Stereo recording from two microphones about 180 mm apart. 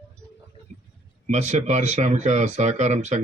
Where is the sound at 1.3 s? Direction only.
40° right (ahead or behind).